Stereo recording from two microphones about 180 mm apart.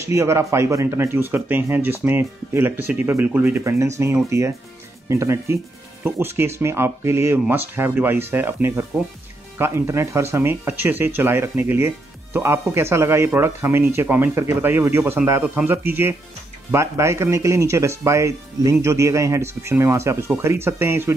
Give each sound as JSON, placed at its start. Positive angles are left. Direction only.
{"t": 0.0, "sound": "speech", "side_deg": -15}